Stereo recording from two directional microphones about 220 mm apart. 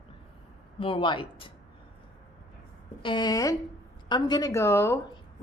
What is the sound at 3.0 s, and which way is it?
A woman's voice, 20° left (ahead or behind).